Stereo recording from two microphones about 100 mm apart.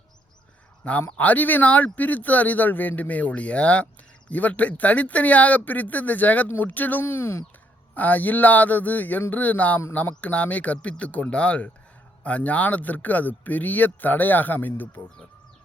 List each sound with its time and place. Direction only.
1.1 s speech: 15° left (ahead or behind)